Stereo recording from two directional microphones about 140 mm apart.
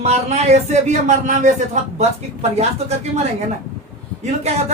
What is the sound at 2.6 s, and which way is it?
Speech, 50° right (ahead or behind).